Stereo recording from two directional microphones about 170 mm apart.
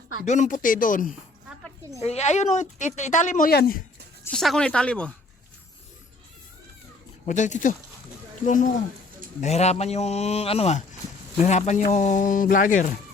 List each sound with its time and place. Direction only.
0.3 s speech: 45° left (ahead or behind)
2.0 s speech: 40° left (ahead or behind); by 3.8 s 60° left (ahead or behind)
4.2 s speech: 5° left (ahead or behind)
7.3 s a man's voice: 45° left (ahead or behind)